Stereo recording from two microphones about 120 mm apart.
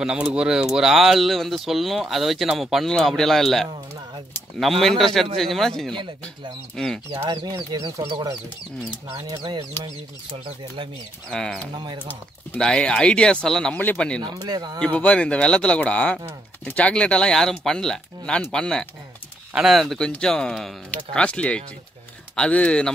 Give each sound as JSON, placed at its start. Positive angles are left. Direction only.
{"t": 0.0, "sound": "speech", "side_deg": -5}
{"t": 7.1, "sound": "speech", "side_deg": -40}
{"t": 11.2, "sound": "speech", "side_deg": 5}
{"t": 11.7, "sound": "speech", "side_deg": -40}
{"t": 12.5, "sound": "speech", "side_deg": 5}
{"t": 14.2, "sound": "speech", "side_deg": -35}
{"t": 14.8, "sound": "speech", "side_deg": 10}